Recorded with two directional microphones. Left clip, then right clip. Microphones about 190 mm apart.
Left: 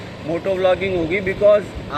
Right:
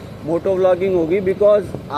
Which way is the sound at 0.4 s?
50° right (ahead or behind).